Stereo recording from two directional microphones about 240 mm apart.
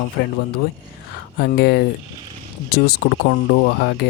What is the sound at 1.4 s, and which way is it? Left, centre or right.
Speech, left.